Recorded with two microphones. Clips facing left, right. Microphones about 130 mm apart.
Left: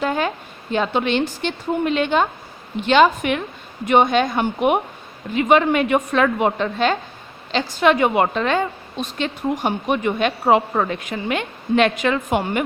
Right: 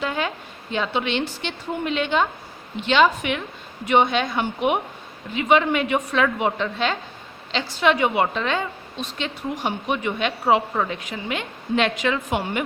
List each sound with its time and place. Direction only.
0.0 s a woman's voice: 45° left (ahead or behind)